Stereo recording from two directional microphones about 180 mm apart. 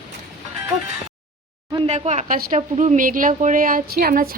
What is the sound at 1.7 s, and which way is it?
A woman's voice, 30° right (ahead or behind).